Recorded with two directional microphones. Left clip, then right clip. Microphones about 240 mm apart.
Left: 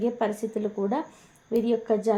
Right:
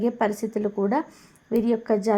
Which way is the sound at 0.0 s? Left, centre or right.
Right.